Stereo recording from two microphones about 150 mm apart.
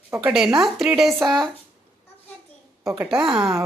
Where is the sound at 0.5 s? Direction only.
Centre (ahead or behind).